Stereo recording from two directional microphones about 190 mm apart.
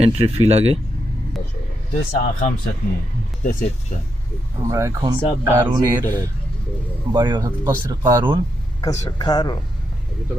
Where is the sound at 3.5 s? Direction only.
40° left (ahead or behind).